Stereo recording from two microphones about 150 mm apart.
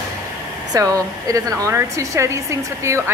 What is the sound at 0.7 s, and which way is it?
A woman's voice, 25° right (ahead or behind).